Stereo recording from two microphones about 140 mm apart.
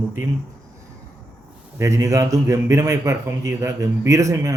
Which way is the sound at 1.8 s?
20° right (ahead or behind).